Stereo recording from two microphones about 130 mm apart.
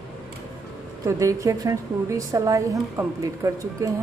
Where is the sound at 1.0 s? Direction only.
25° right (ahead or behind).